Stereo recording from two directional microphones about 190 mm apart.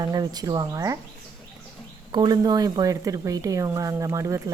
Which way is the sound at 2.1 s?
20° right (ahead or behind).